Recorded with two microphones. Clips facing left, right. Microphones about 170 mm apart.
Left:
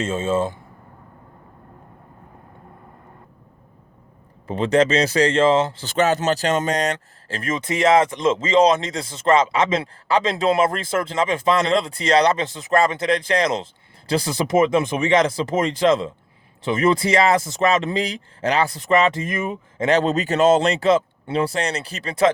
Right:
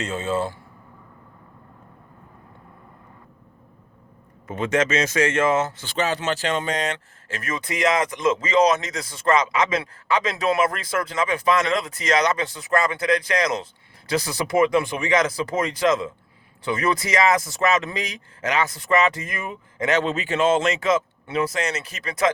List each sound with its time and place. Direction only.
0.0 s speech: 20° left (ahead or behind)
4.4 s speech: 30° left (ahead or behind)
5.8 s speech: 45° left (ahead or behind); by 19.9 s 20° left (ahead or behind)
19.9 s speech: 40° left (ahead or behind)